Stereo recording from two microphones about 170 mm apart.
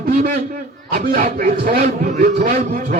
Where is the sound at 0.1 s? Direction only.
60° right (ahead or behind).